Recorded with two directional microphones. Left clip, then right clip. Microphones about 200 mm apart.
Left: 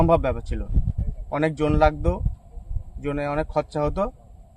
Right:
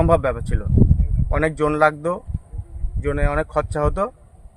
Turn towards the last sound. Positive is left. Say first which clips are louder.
# right 3 dB
turn(degrees=-5)  # may be behind; listen again after turning